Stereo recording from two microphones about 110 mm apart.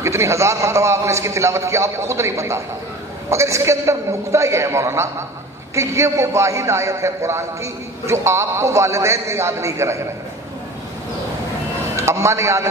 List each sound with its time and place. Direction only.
0.0 s a man's voice: 25° right (ahead or behind)
12.0 s a man's voice: 25° right (ahead or behind)